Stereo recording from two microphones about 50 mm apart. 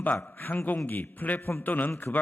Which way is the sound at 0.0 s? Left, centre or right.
Left.